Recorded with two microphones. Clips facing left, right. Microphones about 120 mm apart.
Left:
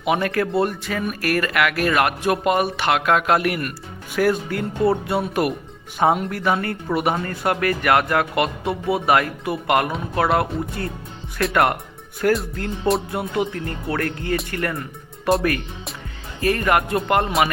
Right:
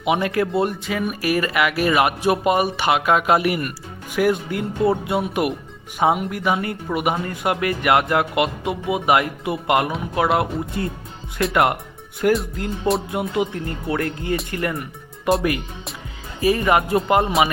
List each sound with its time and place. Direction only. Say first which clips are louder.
0.0 s speech: right 1 dB; 20° right (ahead or behind); by 3.8 s 5° right (ahead or behind)
4.1 s speech: even; 15° right (ahead or behind)